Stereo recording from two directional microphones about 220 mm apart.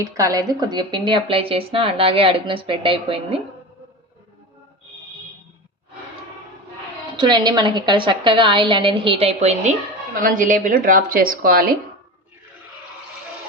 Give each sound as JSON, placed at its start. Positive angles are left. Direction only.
{"t": 0.0, "sound": "speech", "side_deg": -15}
{"t": 7.2, "sound": "a woman's voice", "side_deg": -20}